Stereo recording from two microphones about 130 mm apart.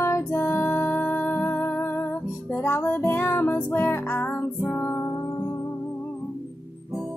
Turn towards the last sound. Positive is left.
turn(degrees=25)  # may be behind; listen again after turning